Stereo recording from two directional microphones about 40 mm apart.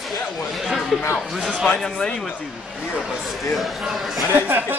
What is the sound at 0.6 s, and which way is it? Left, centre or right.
Chatter, centre.